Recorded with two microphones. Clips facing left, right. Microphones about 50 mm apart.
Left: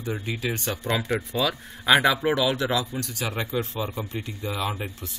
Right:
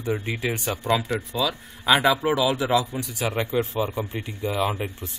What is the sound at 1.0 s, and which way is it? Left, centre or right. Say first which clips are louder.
Speech: even; centre.